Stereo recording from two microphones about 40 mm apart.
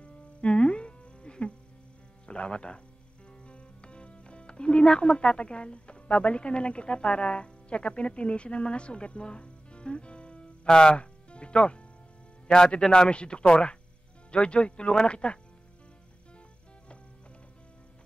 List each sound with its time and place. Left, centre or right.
0.0 s music: left
2.2 s a woman's voice: left